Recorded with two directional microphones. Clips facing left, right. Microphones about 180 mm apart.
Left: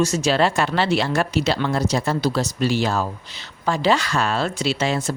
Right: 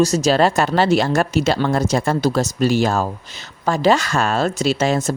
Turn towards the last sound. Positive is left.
turn(degrees=-45)  # may be behind; listen again after turning